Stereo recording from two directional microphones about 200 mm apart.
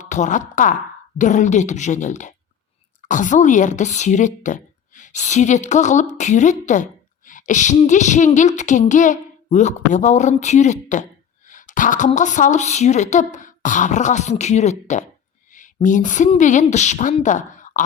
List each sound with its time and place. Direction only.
0.0 s speech: 35° left (ahead or behind)
1.2 s a sound: 40° left (ahead or behind)
11.4 s a woman's voice: 40° left (ahead or behind)